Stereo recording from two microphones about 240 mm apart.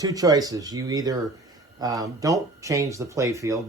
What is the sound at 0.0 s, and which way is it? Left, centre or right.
Speech, centre.